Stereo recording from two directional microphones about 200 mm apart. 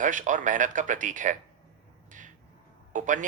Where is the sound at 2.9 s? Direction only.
40° right (ahead or behind).